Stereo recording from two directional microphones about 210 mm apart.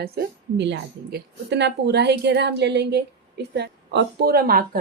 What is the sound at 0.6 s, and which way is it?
A woman's voice, 55° right (ahead or behind).